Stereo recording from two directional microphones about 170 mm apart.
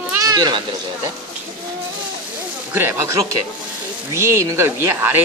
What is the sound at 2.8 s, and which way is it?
Speech, 15° right (ahead or behind).